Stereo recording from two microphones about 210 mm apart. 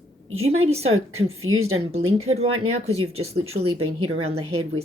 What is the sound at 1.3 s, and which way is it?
Speech, 85° right.